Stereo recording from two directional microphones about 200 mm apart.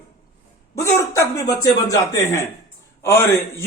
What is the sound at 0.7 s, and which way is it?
Speech, 15° left (ahead or behind).